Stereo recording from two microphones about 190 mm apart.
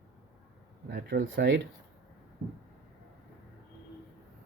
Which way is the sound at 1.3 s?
70° right (ahead or behind).